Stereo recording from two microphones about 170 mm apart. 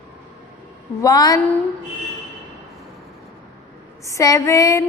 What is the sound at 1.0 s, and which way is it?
Female singing, 20° left (ahead or behind).